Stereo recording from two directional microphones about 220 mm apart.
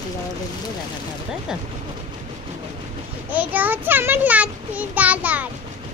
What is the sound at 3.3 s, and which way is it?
A child's voice, 10° right (ahead or behind).